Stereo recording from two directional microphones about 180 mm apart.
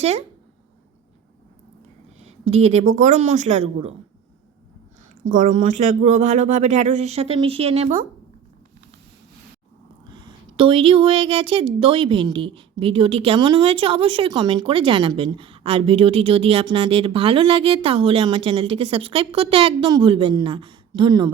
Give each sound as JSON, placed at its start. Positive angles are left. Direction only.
{"t": 0.0, "sound": "speech", "side_deg": -35}
{"t": 2.2, "sound": "speech", "side_deg": -35}
{"t": 5.2, "sound": "speech", "side_deg": -45}
{"t": 10.1, "sound": "a woman's voice", "side_deg": -25}